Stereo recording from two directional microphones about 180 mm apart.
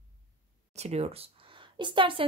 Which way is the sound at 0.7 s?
35° right (ahead or behind).